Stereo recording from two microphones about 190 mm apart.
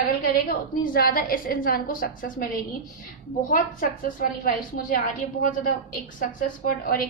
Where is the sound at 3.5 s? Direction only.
45° left (ahead or behind).